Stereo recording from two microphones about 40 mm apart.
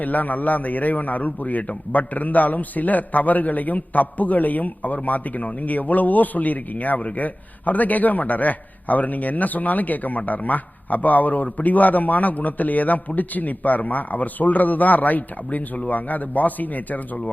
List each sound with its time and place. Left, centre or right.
0.0 s a man's voice: left